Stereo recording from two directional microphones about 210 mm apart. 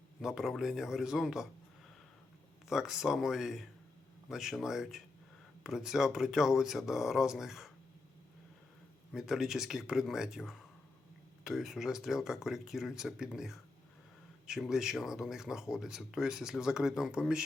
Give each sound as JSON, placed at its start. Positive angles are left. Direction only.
{"t": 0.2, "sound": "speech", "side_deg": 0}
{"t": 2.6, "sound": "speech", "side_deg": 0}
{"t": 9.1, "sound": "speech", "side_deg": 0}